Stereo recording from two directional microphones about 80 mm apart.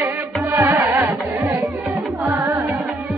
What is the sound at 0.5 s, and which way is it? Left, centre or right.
Music, right.